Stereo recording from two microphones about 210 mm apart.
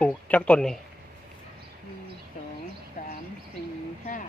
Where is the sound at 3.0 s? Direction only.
35° left (ahead or behind).